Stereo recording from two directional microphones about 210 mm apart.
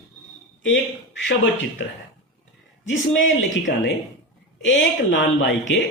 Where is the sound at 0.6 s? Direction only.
60° left (ahead or behind).